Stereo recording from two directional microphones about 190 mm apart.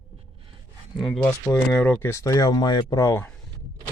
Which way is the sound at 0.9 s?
Centre (ahead or behind).